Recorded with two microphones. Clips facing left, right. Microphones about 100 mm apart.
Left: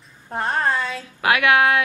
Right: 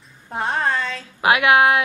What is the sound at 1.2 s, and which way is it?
Speech, 20° right (ahead or behind).